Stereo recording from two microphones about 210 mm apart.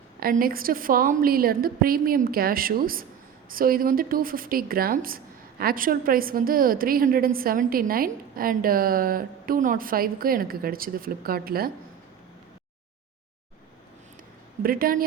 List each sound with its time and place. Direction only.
0.2 s speech: 45° right (ahead or behind)
14.6 s speech: 45° right (ahead or behind)